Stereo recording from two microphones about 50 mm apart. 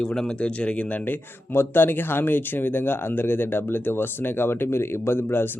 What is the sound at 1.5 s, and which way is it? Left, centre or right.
Speech, left.